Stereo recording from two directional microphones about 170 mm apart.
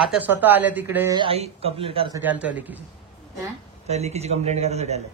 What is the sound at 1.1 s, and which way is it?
Speech, 35° right (ahead or behind).